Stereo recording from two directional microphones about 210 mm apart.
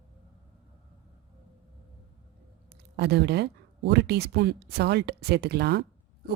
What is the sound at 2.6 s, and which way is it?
Speech, 50° right (ahead or behind).